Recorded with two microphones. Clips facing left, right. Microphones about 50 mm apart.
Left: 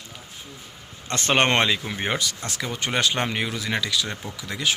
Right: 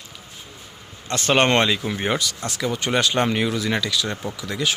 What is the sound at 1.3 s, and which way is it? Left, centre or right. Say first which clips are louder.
Speech: right 2 dB; left.